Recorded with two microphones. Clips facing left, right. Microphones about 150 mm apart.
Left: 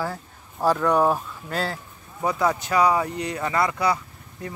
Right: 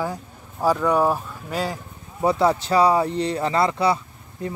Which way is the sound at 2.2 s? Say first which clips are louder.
Right 4 dB; 30° right (ahead or behind).